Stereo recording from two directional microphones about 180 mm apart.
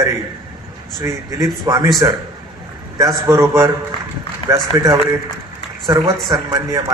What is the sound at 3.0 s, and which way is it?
Speech, 15° right (ahead or behind).